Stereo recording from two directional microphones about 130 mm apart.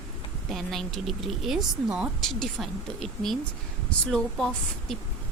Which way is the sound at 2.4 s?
Centre (ahead or behind).